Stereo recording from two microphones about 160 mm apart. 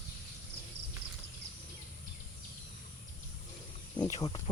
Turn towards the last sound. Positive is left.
turn(degrees=25)  # may be behind; listen again after turning